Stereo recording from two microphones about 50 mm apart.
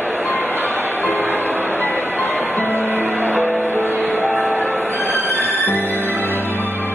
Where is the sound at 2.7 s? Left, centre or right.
Right.